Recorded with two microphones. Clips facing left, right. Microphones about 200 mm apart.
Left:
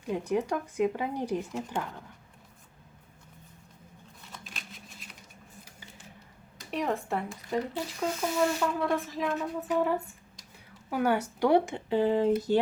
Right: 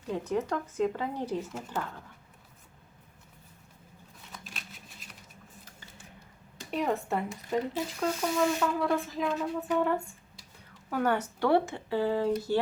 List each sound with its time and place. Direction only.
0.0 s speech: 10° left (ahead or behind)
4.3 s a sound: centre (ahead or behind)
6.7 s speech: centre (ahead or behind); by 12.3 s 20° left (ahead or behind)